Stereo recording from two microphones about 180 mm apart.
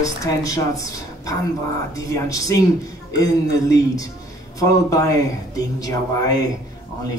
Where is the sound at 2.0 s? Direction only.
20° left (ahead or behind).